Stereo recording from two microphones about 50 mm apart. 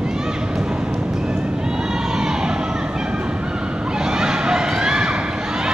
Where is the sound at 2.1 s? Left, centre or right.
Centre.